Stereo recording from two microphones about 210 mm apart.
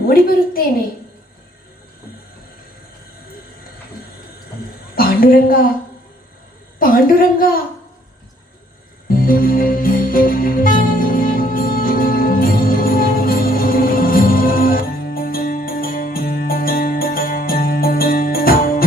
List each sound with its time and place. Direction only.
0.1 s a woman's voice: 45° left (ahead or behind)
4.9 s a woman's voice: 45° left (ahead or behind)
6.7 s a woman's voice: 45° left (ahead or behind)
9.0 s music: 40° left (ahead or behind)